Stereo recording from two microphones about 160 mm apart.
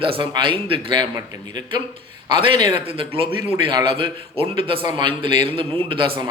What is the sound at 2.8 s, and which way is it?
Speech, 35° right (ahead or behind).